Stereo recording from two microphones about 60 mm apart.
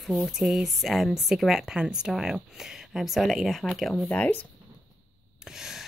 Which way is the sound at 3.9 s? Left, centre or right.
Left.